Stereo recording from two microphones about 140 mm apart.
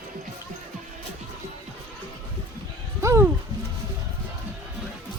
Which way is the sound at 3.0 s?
20° right (ahead or behind).